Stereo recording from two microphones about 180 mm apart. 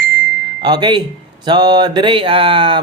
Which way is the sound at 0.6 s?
25° right (ahead or behind).